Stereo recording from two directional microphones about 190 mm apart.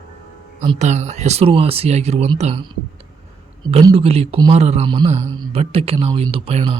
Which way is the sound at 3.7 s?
30° right (ahead or behind).